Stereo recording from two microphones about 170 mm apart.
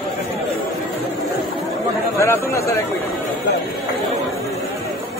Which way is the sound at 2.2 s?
15° left (ahead or behind).